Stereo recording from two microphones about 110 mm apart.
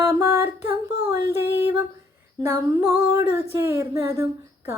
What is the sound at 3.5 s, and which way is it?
A woman's voice, 25° right (ahead or behind).